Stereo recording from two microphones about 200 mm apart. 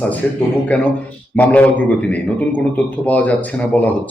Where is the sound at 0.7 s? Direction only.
5° left (ahead or behind).